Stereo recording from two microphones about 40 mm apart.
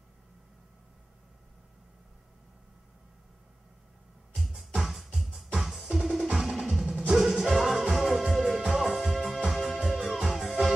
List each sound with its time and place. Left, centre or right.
4.7 s music: centre
9.8 s music: centre